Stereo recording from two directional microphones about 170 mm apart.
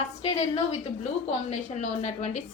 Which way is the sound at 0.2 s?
35° left (ahead or behind).